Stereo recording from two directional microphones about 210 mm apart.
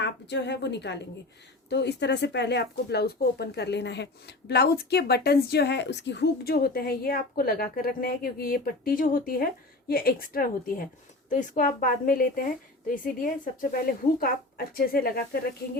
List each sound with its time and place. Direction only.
0.0 s a woman's voice: 55° left (ahead or behind)